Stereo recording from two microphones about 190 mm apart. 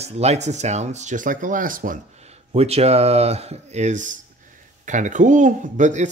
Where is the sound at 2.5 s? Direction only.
30° right (ahead or behind).